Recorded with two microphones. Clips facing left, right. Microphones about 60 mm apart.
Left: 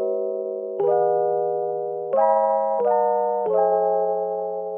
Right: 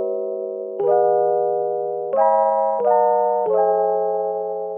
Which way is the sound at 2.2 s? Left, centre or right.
Right.